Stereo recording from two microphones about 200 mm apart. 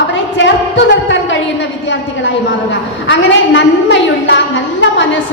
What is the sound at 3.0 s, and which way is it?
A woman's voice, 65° left (ahead or behind).